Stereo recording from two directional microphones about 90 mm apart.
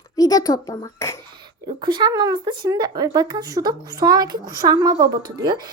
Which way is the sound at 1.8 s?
55° right (ahead or behind).